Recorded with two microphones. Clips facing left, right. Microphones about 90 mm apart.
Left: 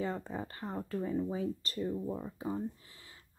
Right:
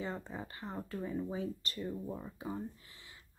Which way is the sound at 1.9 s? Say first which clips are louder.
Left 4 dB; 15° left (ahead or behind).